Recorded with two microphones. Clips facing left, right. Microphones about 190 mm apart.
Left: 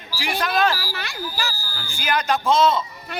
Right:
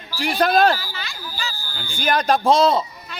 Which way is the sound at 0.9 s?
65° left (ahead or behind).